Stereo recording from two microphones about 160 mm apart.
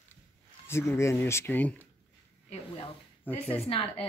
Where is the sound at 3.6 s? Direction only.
35° left (ahead or behind).